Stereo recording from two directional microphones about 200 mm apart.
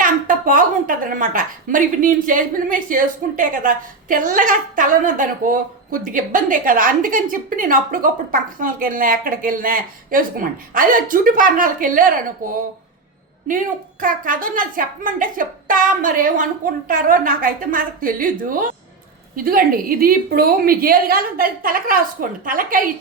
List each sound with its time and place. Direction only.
0.0 s a woman's voice: 40° right (ahead or behind)
14.0 s a woman's voice: 40° right (ahead or behind)